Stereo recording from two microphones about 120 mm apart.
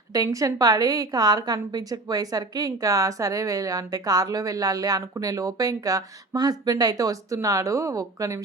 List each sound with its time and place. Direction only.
0.1 s a woman's voice: 30° right (ahead or behind)